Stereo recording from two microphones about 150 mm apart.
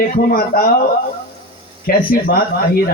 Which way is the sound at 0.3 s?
75° left (ahead or behind).